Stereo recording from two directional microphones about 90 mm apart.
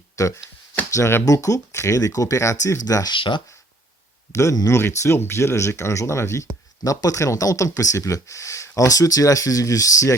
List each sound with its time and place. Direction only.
0.2 s speech: 35° left (ahead or behind)
3.2 s speech: 65° left (ahead or behind)
4.3 s speech: 35° left (ahead or behind)